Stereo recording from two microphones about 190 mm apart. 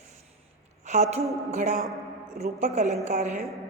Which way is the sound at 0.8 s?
35° right (ahead or behind).